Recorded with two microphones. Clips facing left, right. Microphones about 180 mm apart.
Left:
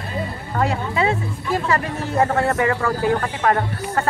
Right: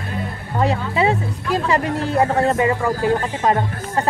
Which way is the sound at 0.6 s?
20° right (ahead or behind).